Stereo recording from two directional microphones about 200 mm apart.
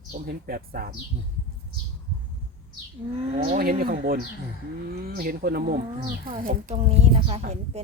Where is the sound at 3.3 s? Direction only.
30° right (ahead or behind).